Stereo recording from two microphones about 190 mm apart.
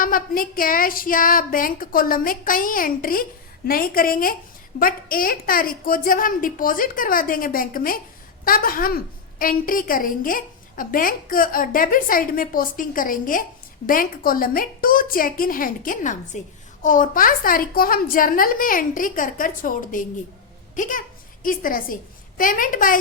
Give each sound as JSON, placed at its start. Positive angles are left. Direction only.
{"t": 0.0, "sound": "a woman's voice", "side_deg": 45}